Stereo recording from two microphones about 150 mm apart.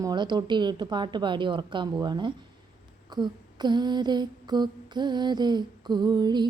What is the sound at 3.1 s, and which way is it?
Humming, 30° right (ahead or behind).